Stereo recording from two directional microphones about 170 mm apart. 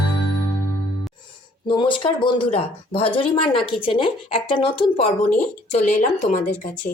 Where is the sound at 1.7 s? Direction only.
30° left (ahead or behind).